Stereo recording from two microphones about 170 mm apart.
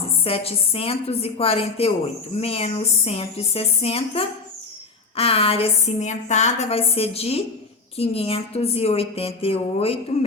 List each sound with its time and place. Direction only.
0.0 s a woman's voice: 35° left (ahead or behind)